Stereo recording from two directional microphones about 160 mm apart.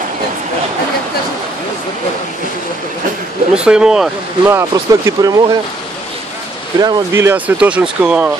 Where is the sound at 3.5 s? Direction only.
5° right (ahead or behind).